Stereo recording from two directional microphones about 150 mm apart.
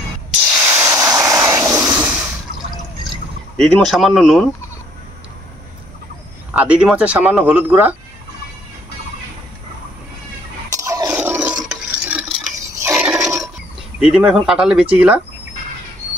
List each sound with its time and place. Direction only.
0.5 s spray: 15° right (ahead or behind)
1.1 s a sound: 20° right (ahead or behind)
3.5 s speech: centre (ahead or behind)
6.5 s speech: 10° right (ahead or behind)
10.7 s a sound: 20° right (ahead or behind)
11.1 s toothbrush: 10° right (ahead or behind)
11.7 s stir: 5° right (ahead or behind)
13.9 s speech: 5° right (ahead or behind)